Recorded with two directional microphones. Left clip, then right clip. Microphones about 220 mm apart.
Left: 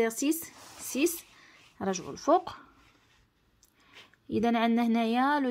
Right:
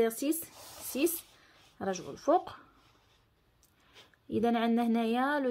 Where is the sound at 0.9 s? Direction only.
20° left (ahead or behind).